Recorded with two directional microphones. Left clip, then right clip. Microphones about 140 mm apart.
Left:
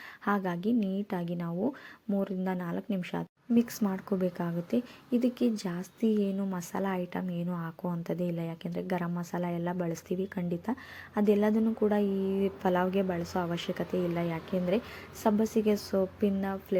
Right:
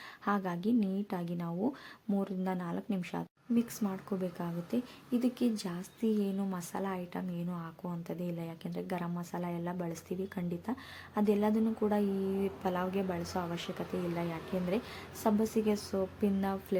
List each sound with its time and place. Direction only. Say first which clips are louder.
0.3 s a woman's voice: left 3 dB; 20° left (ahead or behind)
3.5 s a woman's voice: left 5 dB; 35° left (ahead or behind)
16.4 s a woman's voice: left 1 dB; 10° left (ahead or behind)